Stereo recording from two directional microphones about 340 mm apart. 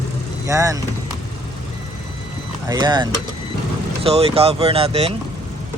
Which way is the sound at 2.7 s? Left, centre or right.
Centre.